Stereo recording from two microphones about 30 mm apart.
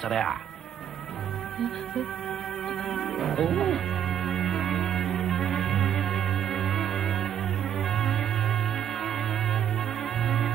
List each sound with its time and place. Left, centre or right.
0.1 s speech: centre
2.9 s music: centre
10.2 s music: centre